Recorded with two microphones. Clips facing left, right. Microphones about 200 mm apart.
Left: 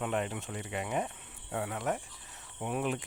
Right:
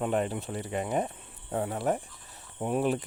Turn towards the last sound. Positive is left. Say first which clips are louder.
# right 6 dB
turn(degrees=-35)  # may be behind; listen again after turning